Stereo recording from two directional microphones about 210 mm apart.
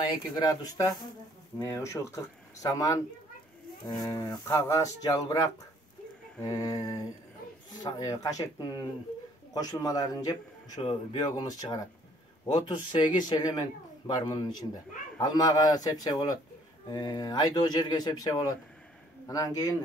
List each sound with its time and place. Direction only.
0.4 s a man's voice: 20° left (ahead or behind)